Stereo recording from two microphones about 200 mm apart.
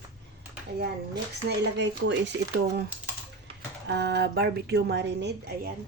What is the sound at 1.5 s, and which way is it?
Speech, 60° right (ahead or behind).